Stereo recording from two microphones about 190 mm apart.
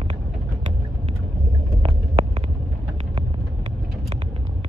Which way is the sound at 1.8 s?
30° right (ahead or behind).